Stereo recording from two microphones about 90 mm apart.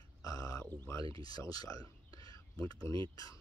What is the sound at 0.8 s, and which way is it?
Speech, 40° left (ahead or behind).